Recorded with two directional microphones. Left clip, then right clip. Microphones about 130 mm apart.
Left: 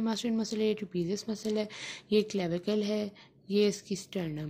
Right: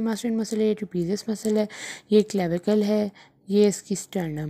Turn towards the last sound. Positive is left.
turn(degrees=-40)  # may be behind; listen again after turning